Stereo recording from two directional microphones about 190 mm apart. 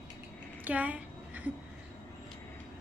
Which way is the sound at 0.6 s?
10° right (ahead or behind).